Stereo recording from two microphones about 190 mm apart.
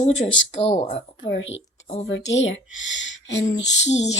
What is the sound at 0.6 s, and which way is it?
Speech, 35° left (ahead or behind).